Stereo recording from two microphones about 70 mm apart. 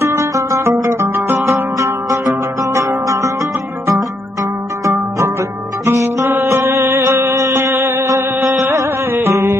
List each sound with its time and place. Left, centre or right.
0.0 s music: right
1.8 s zither: right
5.9 s music: right